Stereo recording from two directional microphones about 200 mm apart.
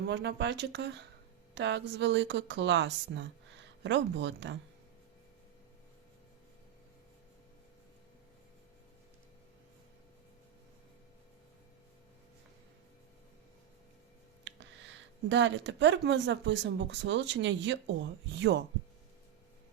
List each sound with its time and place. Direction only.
0.0 s speech: 60° right (ahead or behind)
15.3 s speech: 65° right (ahead or behind)